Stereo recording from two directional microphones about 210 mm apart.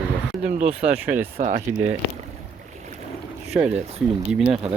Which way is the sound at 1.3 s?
35° right (ahead or behind).